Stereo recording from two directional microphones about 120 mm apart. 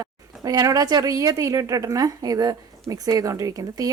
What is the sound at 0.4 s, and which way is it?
A woman's voice, 30° right (ahead or behind).